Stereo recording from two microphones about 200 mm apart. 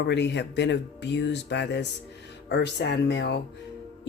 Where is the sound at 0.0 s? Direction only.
60° left (ahead or behind).